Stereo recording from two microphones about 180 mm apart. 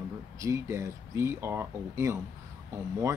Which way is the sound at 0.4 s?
15° right (ahead or behind).